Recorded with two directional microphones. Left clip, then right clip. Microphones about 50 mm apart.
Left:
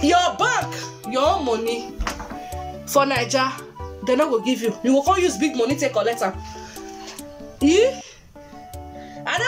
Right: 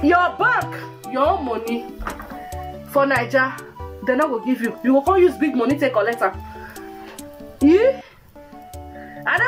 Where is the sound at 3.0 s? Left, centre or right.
Centre.